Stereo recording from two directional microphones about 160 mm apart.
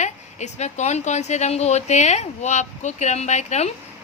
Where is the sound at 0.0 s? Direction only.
45° left (ahead or behind).